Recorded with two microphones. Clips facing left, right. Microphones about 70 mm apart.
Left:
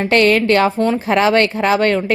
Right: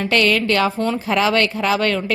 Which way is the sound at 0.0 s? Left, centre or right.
Left.